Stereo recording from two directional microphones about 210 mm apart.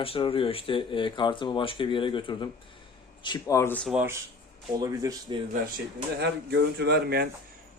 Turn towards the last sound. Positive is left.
turn(degrees=-50)  # may be behind; listen again after turning